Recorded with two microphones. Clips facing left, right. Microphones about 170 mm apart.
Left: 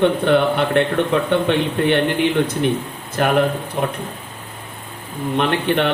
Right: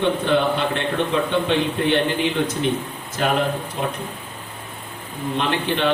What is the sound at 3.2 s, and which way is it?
Speech, 60° left (ahead or behind).